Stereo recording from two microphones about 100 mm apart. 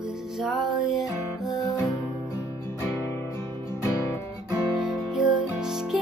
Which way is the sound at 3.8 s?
25° left (ahead or behind).